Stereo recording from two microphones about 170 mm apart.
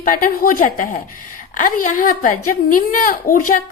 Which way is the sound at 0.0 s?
55° left (ahead or behind).